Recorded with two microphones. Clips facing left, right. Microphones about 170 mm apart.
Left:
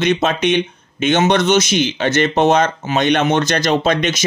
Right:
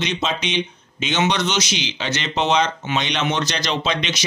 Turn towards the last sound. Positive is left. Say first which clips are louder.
# left 7 dB
turn(degrees=50)  # may be behind; listen again after turning